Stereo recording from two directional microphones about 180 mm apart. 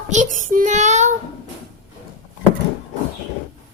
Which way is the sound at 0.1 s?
45° right (ahead or behind).